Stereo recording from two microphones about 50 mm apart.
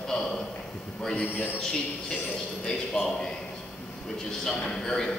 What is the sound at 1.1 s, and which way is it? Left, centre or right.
Speech, left.